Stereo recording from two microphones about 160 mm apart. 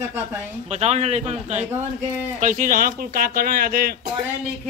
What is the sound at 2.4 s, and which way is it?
Speech, 55° right (ahead or behind).